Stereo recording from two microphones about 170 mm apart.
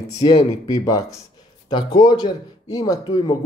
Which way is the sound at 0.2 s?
35° left (ahead or behind).